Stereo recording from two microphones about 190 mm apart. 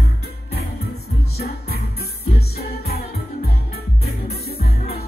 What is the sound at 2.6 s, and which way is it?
Music, 55° left (ahead or behind).